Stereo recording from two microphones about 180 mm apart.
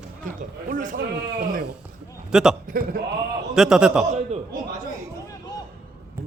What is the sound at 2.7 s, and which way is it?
Speech, 50° right (ahead or behind).